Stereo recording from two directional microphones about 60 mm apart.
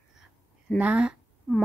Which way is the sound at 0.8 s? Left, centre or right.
Right.